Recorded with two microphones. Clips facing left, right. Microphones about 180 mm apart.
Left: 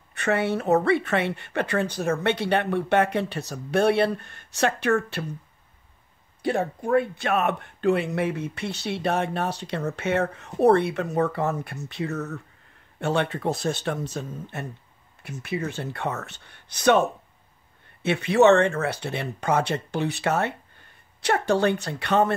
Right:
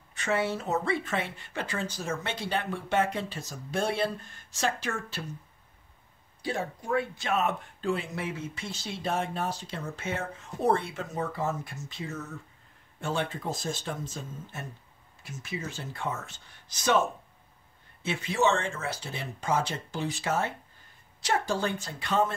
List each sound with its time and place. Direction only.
0.1 s speech: 60° left (ahead or behind)
6.4 s speech: 60° left (ahead or behind)
18.0 s speech: 65° left (ahead or behind)